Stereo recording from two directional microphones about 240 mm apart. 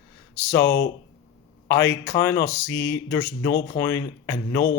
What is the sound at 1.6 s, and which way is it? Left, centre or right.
Speech, centre.